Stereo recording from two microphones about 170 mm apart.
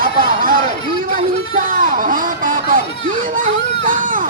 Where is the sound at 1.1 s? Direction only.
55° right (ahead or behind).